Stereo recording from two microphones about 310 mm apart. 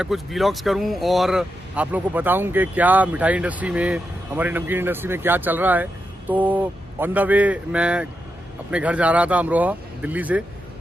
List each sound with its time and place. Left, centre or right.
0.0 s speech: centre